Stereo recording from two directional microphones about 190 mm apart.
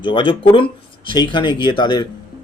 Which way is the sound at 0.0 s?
25° left (ahead or behind).